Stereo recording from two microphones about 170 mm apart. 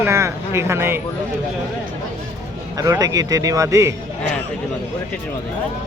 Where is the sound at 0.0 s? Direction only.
15° right (ahead or behind).